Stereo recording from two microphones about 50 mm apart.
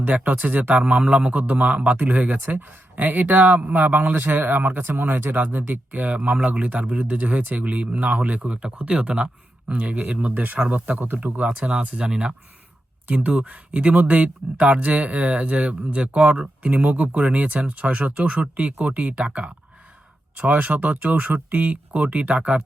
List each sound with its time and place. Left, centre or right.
0.1 s speech: right